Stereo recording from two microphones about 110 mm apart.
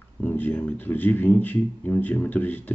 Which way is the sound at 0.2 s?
15° left (ahead or behind).